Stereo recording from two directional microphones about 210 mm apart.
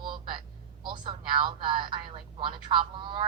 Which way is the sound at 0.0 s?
20° right (ahead or behind).